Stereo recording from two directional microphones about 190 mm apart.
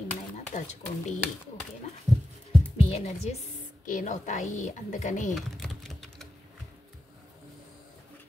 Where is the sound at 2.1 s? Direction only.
20° right (ahead or behind).